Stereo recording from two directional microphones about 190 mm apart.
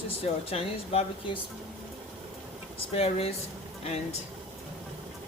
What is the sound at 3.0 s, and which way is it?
Speech, 30° left (ahead or behind).